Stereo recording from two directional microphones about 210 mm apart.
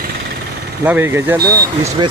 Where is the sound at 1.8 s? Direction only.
30° right (ahead or behind).